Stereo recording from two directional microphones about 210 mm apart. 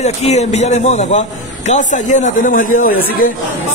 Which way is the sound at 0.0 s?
30° left (ahead or behind).